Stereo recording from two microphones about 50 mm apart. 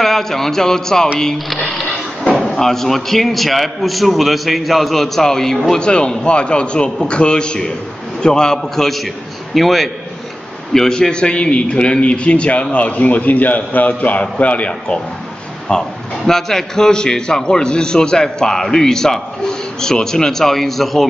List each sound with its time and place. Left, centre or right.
0.0 s a man's voice: centre
2.2 s a man's voice: centre
5.8 s a man's voice: centre
10.7 s a man's voice: centre; by 14.7 s left
15.7 s a man's voice: centre